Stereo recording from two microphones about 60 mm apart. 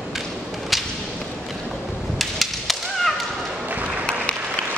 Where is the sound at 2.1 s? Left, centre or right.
Centre.